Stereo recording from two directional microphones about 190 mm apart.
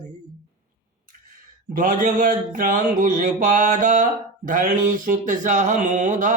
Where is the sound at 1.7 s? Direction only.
45° right (ahead or behind).